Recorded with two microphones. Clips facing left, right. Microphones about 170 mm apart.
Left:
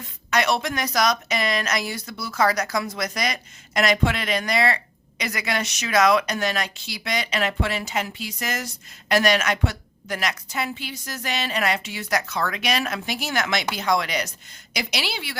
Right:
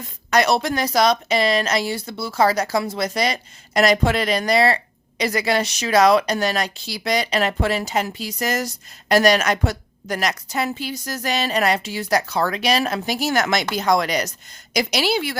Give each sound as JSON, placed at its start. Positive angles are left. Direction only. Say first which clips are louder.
{"t": 0.3, "sound": "a woman's voice", "louder": "right 4 dB", "side_deg": -35}